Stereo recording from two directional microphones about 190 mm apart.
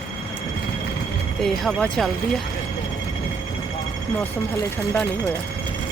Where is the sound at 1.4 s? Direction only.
5° left (ahead or behind).